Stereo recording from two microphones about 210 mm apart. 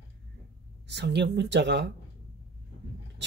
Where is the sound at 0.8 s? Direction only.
55° right (ahead or behind).